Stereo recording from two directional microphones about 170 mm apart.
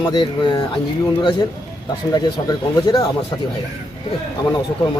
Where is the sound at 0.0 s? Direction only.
25° left (ahead or behind).